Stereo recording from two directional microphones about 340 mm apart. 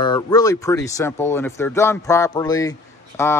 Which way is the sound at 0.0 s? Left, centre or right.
Centre.